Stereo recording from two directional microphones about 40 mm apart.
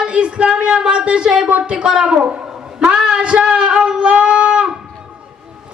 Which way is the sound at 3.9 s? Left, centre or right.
Right.